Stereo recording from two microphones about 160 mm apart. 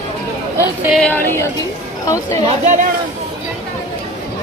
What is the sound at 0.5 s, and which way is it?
Speech, 15° right (ahead or behind).